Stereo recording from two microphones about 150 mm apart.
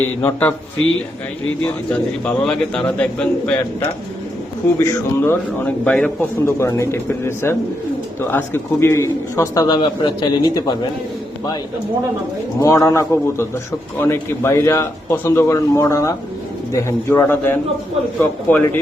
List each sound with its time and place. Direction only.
0.2 s speech: 10° left (ahead or behind)
1.6 s speech: 10° left (ahead or behind)
4.8 s speech: 20° left (ahead or behind)
6.4 s a man's voice: 20° left (ahead or behind)
12.5 s speech: 20° left (ahead or behind)